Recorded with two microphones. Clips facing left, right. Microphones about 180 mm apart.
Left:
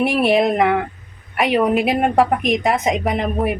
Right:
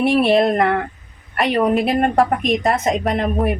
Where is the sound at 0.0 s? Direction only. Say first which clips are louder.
Right 1 dB; 5° left (ahead or behind).